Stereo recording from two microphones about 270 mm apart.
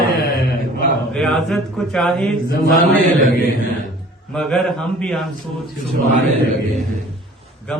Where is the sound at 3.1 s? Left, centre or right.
Right.